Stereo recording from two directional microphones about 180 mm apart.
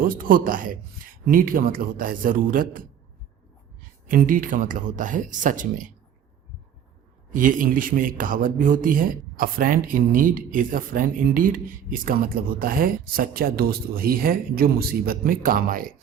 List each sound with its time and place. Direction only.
0.0 s speech: 50° right (ahead or behind)
4.1 s speech: 50° right (ahead or behind)
7.3 s speech: 50° right (ahead or behind)